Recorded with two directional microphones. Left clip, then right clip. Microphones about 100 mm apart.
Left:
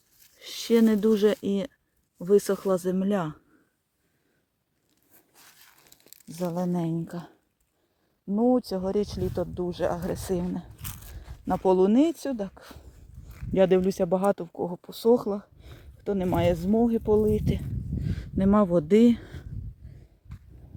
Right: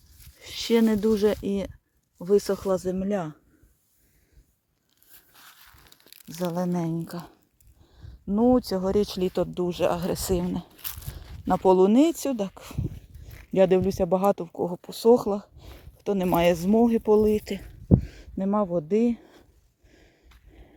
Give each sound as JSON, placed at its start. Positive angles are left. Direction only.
{"t": 0.3, "sound": "speech", "side_deg": 5}
{"t": 5.3, "sound": "a sound", "side_deg": -20}
{"t": 6.2, "sound": "speech", "side_deg": -35}
{"t": 6.5, "sound": "a woman's voice", "side_deg": -5}
{"t": 8.3, "sound": "speech", "side_deg": -25}
{"t": 10.0, "sound": "speech", "side_deg": -25}
{"t": 13.5, "sound": "a woman's voice", "side_deg": 0}
{"t": 14.1, "sound": "speech", "side_deg": -10}
{"t": 18.0, "sound": "a sound", "side_deg": 5}
{"t": 18.3, "sound": "speech", "side_deg": 30}
{"t": 20.3, "sound": "snort", "side_deg": -15}